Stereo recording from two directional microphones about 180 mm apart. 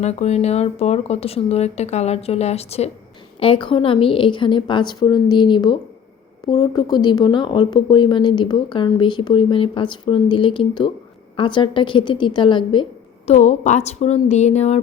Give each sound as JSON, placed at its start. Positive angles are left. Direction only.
{"t": 0.0, "sound": "speech", "side_deg": 35}
{"t": 13.2, "sound": "speech", "side_deg": 40}